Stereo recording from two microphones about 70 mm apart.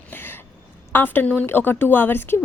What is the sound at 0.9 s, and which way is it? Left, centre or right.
A woman's voice, left.